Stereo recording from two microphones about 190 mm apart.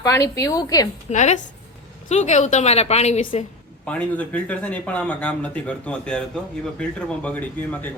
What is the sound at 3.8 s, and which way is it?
A man's voice, 5° left (ahead or behind).